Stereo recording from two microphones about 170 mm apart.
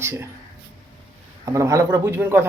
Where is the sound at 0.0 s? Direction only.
15° right (ahead or behind).